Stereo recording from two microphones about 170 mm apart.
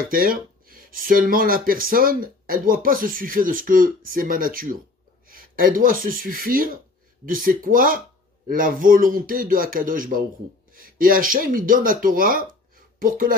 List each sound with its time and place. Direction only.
0.1 s speech: 55° right (ahead or behind)